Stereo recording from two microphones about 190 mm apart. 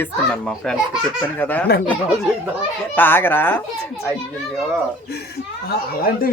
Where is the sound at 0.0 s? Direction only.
5° left (ahead or behind).